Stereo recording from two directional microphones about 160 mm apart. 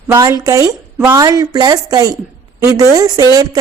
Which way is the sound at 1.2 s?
25° right (ahead or behind).